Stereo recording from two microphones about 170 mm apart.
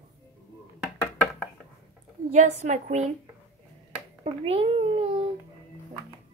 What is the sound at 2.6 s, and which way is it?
Speech, 45° right (ahead or behind).